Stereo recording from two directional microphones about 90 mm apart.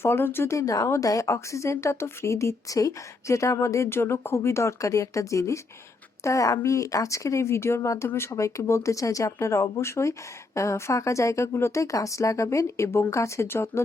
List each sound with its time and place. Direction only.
0.0 s speech: 25° left (ahead or behind)